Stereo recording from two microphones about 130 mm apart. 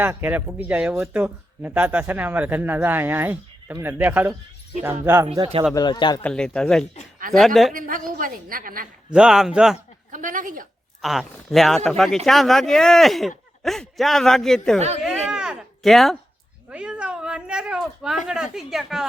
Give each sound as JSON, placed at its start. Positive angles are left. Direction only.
{"t": 0.0, "sound": "speech", "side_deg": -15}
{"t": 5.7, "sound": "speech", "side_deg": 35}
{"t": 6.2, "sound": "speech", "side_deg": 5}
{"t": 7.7, "sound": "a woman's voice", "side_deg": -90}
{"t": 9.1, "sound": "speech", "side_deg": -5}
{"t": 10.1, "sound": "a woman's voice", "side_deg": -90}
{"t": 11.0, "sound": "speech", "side_deg": 0}
{"t": 15.0, "sound": "a sound", "side_deg": -5}
{"t": 16.7, "sound": "cat", "side_deg": -10}
{"t": 18.3, "sound": "speech", "side_deg": -5}